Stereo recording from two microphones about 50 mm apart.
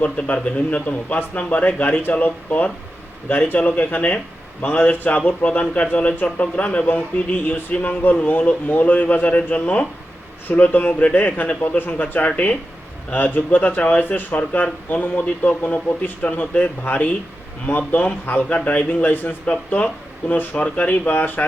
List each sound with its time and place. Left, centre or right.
0.0 s a man's voice: left
18.4 s a man's voice: left